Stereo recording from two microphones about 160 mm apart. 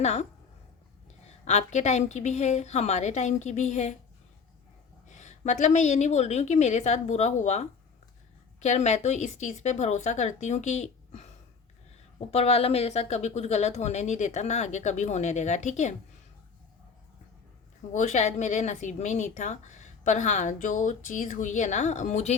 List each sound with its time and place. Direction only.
0.0 s speech: 45° left (ahead or behind)
1.5 s speech: 45° left (ahead or behind)
5.0 s speech: 50° left (ahead or behind)
12.3 s speech: 40° left (ahead or behind)
17.9 s speech: 50° left (ahead or behind)